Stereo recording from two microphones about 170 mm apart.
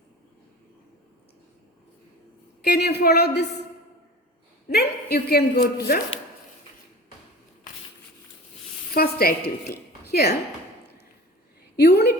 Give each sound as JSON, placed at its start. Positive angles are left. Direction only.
{"t": 2.7, "sound": "a woman's voice", "side_deg": 70}
{"t": 4.7, "sound": "a woman's voice", "side_deg": 70}
{"t": 8.9, "sound": "a woman's voice", "side_deg": 60}
{"t": 11.8, "sound": "a woman's voice", "side_deg": 70}